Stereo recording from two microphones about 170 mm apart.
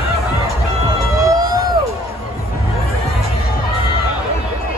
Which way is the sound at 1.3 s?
20° right (ahead or behind).